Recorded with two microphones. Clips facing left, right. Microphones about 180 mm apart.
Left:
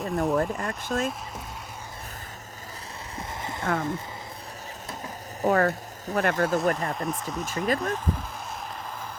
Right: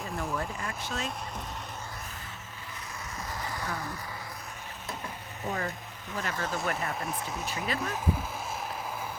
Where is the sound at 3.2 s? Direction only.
25° left (ahead or behind).